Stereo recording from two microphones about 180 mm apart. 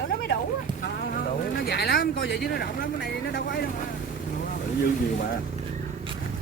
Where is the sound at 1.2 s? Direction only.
60° left (ahead or behind).